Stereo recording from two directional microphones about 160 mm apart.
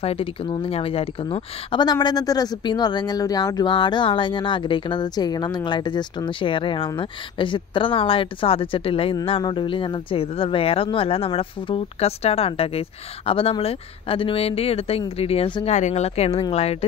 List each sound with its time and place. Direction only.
0.0 s speech: 35° left (ahead or behind)
15.7 s speech: 45° left (ahead or behind)